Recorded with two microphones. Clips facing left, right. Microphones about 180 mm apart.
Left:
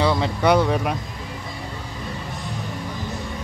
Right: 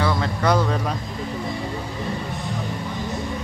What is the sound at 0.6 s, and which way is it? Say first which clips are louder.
Speech: left 2 dB; 15° left (ahead or behind).